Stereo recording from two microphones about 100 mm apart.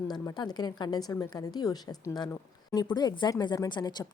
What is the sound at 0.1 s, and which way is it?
A woman's voice, 45° left (ahead or behind).